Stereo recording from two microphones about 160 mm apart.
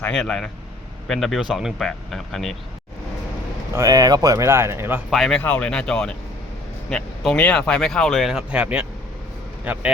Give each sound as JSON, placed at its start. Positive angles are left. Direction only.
{"t": 0.0, "sound": "speech", "side_deg": 5}
{"t": 3.7, "sound": "speech", "side_deg": -20}
{"t": 5.1, "sound": "speech", "side_deg": 0}